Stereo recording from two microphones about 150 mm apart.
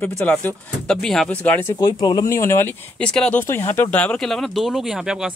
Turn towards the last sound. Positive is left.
turn(degrees=-5)  # may be behind; listen again after turning